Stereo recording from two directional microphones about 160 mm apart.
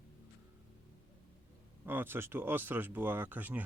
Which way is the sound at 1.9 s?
15° right (ahead or behind).